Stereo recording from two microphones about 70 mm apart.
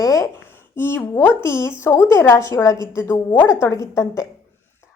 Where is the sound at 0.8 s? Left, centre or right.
Left.